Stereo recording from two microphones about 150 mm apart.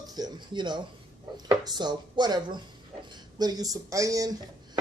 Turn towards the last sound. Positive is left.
turn(degrees=-20)  # may be behind; listen again after turning